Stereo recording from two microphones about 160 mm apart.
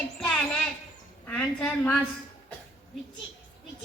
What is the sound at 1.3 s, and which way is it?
Speech, 5° left (ahead or behind).